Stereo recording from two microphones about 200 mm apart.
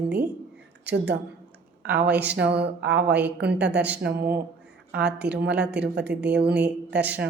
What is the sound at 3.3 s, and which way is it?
Speech, 55° right (ahead or behind).